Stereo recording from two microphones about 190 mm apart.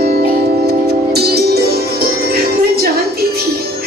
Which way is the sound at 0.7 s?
55° right (ahead or behind).